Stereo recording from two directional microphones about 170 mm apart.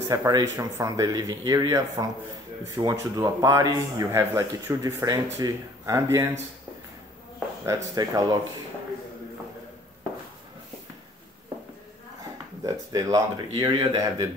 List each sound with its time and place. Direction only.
0.1 s speech: 20° right (ahead or behind)
7.6 s speech: 20° right (ahead or behind)
12.6 s speech: 20° right (ahead or behind)